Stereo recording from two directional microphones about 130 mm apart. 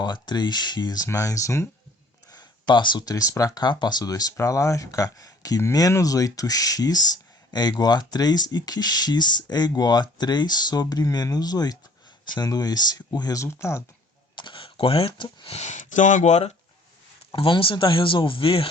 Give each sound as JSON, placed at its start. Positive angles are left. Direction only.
{"t": 0.0, "sound": "speech", "side_deg": 35}
{"t": 2.3, "sound": "speech", "side_deg": 35}
{"t": 14.3, "sound": "speech", "side_deg": 40}
{"t": 15.5, "sound": "speech", "side_deg": 65}
{"t": 17.3, "sound": "speech", "side_deg": 40}